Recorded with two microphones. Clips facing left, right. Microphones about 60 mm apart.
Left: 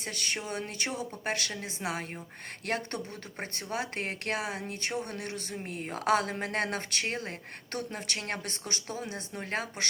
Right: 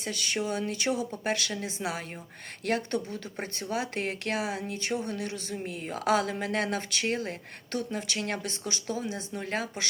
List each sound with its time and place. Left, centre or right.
0.0 s speech: left